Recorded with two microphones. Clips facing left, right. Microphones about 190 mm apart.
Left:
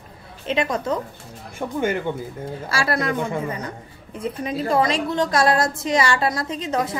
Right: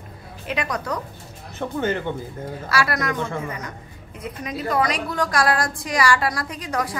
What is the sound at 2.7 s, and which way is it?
A woman's voice, 25° left (ahead or behind).